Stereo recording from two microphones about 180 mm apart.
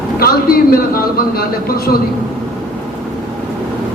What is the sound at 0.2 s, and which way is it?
A man's voice, 55° left (ahead or behind).